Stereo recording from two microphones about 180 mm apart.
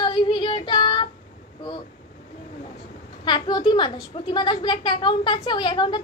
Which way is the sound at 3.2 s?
25° left (ahead or behind).